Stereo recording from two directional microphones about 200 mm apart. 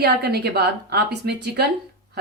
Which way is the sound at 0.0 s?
55° right (ahead or behind).